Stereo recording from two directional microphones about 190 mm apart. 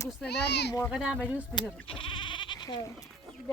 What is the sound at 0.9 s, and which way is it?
Speech, centre (ahead or behind).